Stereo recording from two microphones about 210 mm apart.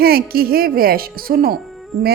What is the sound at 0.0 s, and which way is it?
A woman's voice, 45° right (ahead or behind).